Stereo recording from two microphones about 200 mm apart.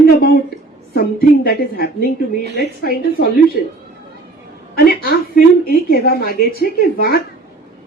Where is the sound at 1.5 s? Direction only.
50° left (ahead or behind).